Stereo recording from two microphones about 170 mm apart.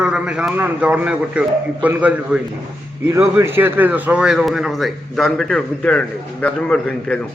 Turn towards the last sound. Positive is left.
turn(degrees=5)  # may be behind; listen again after turning